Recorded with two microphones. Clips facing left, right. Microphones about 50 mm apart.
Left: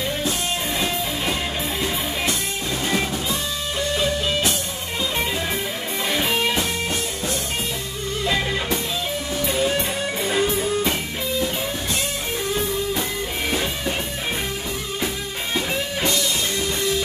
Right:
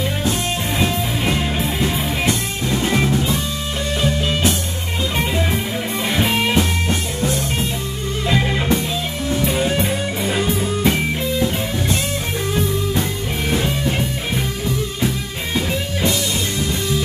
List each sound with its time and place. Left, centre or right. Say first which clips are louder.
2.2 s music: right 4 dB; centre
6.0 s music: right 2 dB; centre
9.7 s music: right 3 dB; centre